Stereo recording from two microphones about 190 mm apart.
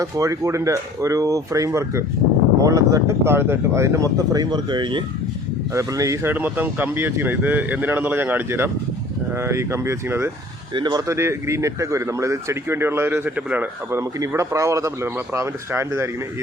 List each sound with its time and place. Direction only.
0.0 s a man's voice: 15° right (ahead or behind)